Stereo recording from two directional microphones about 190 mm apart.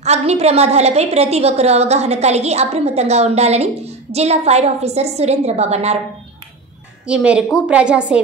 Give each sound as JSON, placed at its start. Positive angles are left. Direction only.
{"t": 0.0, "sound": "a woman's voice", "side_deg": -35}
{"t": 7.1, "sound": "a woman's voice", "side_deg": -5}